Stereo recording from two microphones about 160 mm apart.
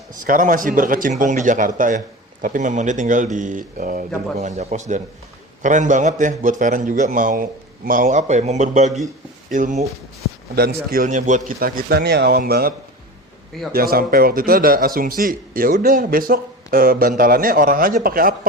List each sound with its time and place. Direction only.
0.3 s a man's voice: 60° right (ahead or behind)
4.4 s a man's voice: 40° right (ahead or behind)
10.5 s a man's voice: 75° right (ahead or behind)
13.7 s a man's voice: 65° right (ahead or behind)